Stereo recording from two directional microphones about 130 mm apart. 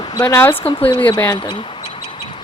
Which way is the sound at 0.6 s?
45° left (ahead or behind).